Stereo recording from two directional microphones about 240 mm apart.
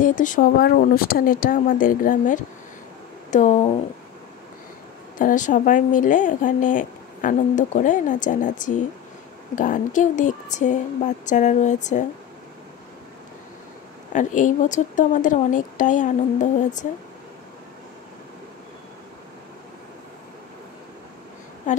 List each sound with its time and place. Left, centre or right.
0.0 s speech: left
5.2 s speech: left
14.1 s speech: left
21.7 s a woman's voice: left